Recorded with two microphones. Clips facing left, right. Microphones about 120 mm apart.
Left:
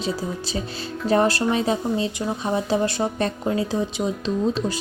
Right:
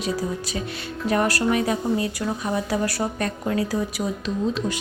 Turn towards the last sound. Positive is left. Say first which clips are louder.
# left 2 dB
turn(degrees=30)  # may be behind; listen again after turning